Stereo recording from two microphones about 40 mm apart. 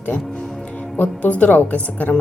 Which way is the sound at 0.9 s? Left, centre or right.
Left.